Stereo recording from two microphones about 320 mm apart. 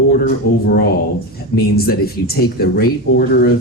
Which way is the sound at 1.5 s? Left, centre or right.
Left.